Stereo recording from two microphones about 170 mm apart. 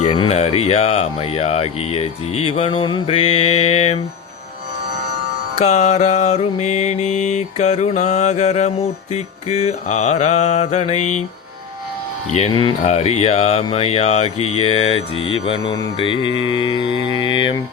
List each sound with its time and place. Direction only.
0.0 s mantra: 35° left (ahead or behind)
5.5 s mantra: 40° left (ahead or behind)
12.3 s mantra: 40° left (ahead or behind)